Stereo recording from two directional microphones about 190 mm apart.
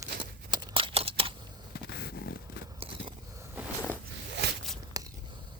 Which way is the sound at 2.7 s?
30° right (ahead or behind).